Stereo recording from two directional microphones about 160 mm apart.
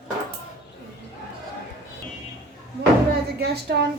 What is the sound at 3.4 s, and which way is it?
Speech, 90° right.